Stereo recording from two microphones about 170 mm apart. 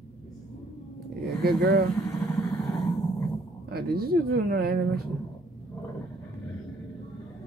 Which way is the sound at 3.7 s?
65° right (ahead or behind).